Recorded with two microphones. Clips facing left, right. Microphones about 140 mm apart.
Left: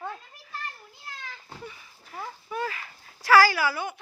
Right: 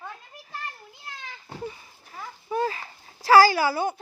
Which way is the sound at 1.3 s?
30° right (ahead or behind).